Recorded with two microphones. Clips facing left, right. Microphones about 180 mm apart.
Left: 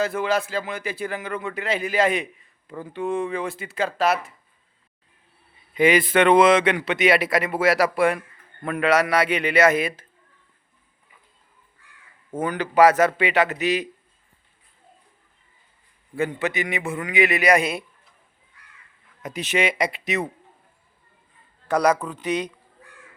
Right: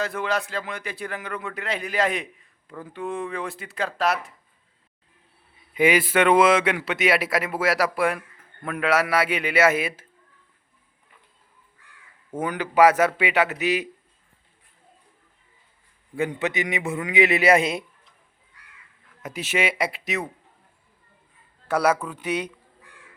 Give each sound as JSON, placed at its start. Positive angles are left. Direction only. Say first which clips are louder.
{"t": 0.0, "sound": "a man's voice", "louder": "left 4 dB", "side_deg": 0}
{"t": 5.7, "sound": "a man's voice", "louder": "left 2 dB", "side_deg": -10}
{"t": 12.4, "sound": "a man's voice", "louder": "left 1 dB", "side_deg": -10}
{"t": 16.1, "sound": "a man's voice", "louder": "left 1 dB", "side_deg": -15}
{"t": 19.2, "sound": "a man's voice", "louder": "left 2 dB", "side_deg": -5}
{"t": 21.7, "sound": "a man's voice", "louder": "left 2 dB", "side_deg": -5}